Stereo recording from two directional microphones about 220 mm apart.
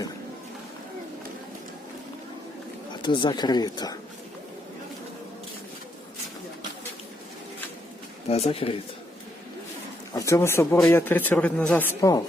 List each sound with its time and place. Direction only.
3.0 s speech: 20° left (ahead or behind)
8.3 s speech: 25° left (ahead or behind)
10.2 s speech: 15° left (ahead or behind)